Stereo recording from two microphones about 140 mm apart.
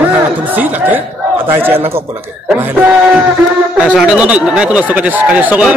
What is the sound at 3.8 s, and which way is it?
Speech, 5° right (ahead or behind).